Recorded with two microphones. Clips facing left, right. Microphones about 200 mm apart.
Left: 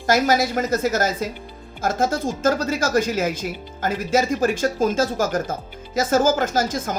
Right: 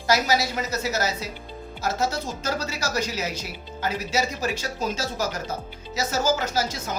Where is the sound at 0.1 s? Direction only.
50° left (ahead or behind).